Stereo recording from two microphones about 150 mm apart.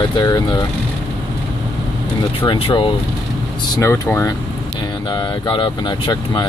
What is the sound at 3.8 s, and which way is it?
Speech, 15° left (ahead or behind).